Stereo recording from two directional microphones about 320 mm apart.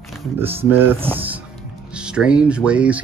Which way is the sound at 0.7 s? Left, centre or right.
Centre.